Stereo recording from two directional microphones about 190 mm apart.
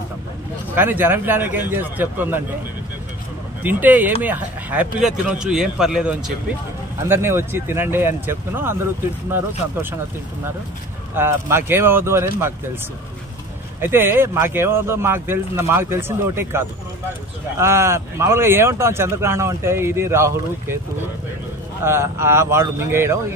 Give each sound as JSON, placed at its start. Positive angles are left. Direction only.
{"t": 0.7, "sound": "speech", "side_deg": -10}
{"t": 3.6, "sound": "speech", "side_deg": -10}
{"t": 11.1, "sound": "speech", "side_deg": -10}
{"t": 13.7, "sound": "speech", "side_deg": -10}
{"t": 21.8, "sound": "speech", "side_deg": -15}